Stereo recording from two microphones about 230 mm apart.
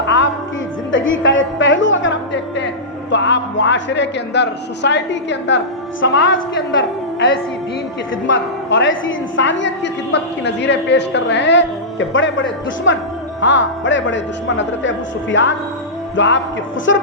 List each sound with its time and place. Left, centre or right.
0.9 s a woman's voice: left
8.1 s a woman's voice: left